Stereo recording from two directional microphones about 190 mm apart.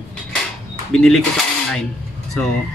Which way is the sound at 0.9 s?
5° left (ahead or behind).